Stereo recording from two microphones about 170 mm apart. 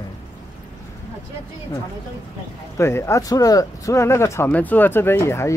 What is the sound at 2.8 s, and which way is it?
Speech, 15° left (ahead or behind).